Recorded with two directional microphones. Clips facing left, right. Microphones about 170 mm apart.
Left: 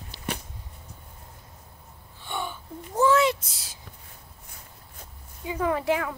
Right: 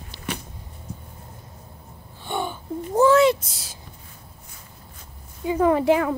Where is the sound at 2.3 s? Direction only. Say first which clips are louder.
Right 5 dB; 35° right (ahead or behind).